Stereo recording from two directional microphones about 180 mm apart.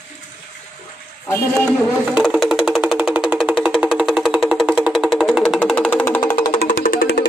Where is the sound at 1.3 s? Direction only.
10° left (ahead or behind).